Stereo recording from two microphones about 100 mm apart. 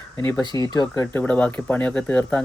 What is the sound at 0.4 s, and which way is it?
Speech, 40° left (ahead or behind).